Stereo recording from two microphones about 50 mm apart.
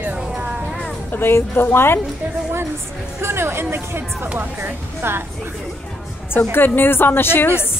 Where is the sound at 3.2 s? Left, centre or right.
Right.